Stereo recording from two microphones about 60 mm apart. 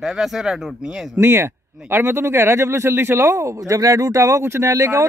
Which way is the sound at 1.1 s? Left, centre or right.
Right.